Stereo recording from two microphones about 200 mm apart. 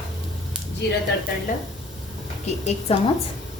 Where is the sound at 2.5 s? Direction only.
35° left (ahead or behind).